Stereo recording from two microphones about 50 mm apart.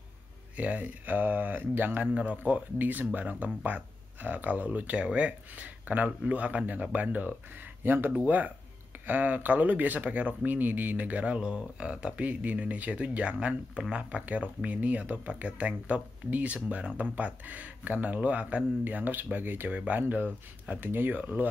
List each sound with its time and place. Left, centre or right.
0.6 s speech: right
2.0 s speech: right
2.8 s speech: right